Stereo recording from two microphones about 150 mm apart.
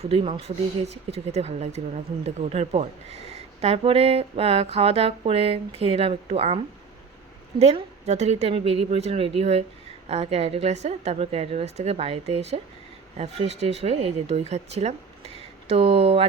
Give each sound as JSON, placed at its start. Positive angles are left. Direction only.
{"t": 0.0, "sound": "speech", "side_deg": -40}
{"t": 7.6, "sound": "speech", "side_deg": -45}